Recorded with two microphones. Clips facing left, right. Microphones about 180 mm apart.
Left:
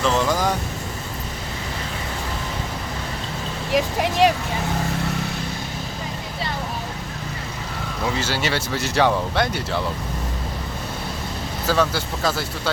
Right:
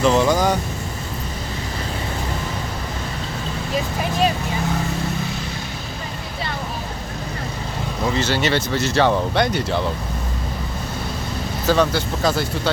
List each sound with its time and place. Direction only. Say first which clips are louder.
0.0 s speech: right 4 dB; 5° right (ahead or behind)
3.8 s speech: left 3 dB; 80° left
8.1 s speech: right 5 dB; 5° left (ahead or behind)
11.7 s speech: right 3 dB; 5° left (ahead or behind)